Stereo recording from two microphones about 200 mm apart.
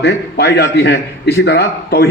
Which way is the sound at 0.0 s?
55° left (ahead or behind).